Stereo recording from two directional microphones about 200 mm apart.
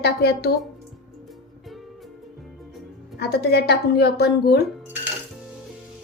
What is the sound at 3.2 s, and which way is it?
A woman's voice, 55° left (ahead or behind).